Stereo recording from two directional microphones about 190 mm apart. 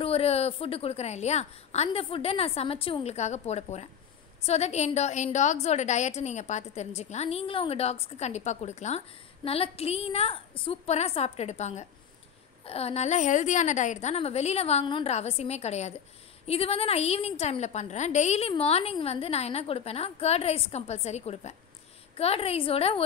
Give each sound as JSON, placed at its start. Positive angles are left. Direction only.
{"t": 0.0, "sound": "a woman's voice", "side_deg": 30}